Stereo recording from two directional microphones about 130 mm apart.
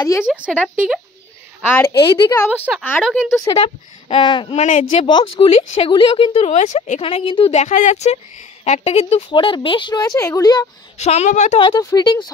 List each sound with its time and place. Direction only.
0.2 s speech: 5° right (ahead or behind)
1.7 s a woman's voice: 15° left (ahead or behind)
2.7 s speech: 10° right (ahead or behind)
3.0 s a woman's voice: centre (ahead or behind)
3.4 s a woman's voice: 45° left (ahead or behind)
4.6 s speech: 65° left (ahead or behind)
5.0 s a woman's voice: 35° left (ahead or behind)
6.5 s speech: 65° left (ahead or behind)
7.0 s a woman's voice: 50° left (ahead or behind)
7.5 s a woman's voice: 65° left (ahead or behind)
9.3 s a woman's voice: 40° left (ahead or behind)
11.0 s speech: 55° left (ahead or behind)
11.7 s a woman's voice: 30° left (ahead or behind)